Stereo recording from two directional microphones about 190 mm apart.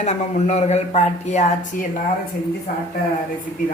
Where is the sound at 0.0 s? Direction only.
40° left (ahead or behind).